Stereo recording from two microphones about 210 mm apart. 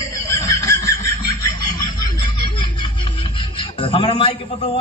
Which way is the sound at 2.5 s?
25° left (ahead or behind).